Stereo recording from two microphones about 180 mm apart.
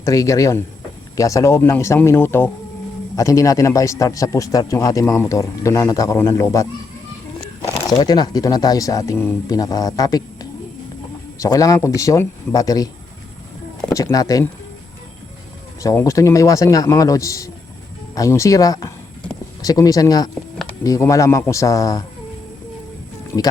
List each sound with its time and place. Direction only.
0.0 s a man's voice: 20° left (ahead or behind)
8.0 s speech: 20° left (ahead or behind)
11.3 s speech: 20° left (ahead or behind)
15.8 s a man's voice: 15° left (ahead or behind)